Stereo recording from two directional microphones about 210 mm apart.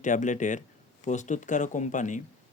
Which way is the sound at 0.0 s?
35° left (ahead or behind).